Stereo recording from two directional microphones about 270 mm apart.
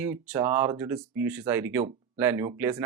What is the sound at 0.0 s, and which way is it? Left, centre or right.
Speech, centre.